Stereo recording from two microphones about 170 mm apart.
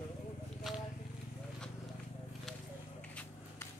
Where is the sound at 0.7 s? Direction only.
Centre (ahead or behind).